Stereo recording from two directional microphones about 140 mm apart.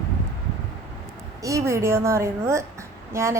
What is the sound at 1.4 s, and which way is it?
A child's voice, 25° right (ahead or behind).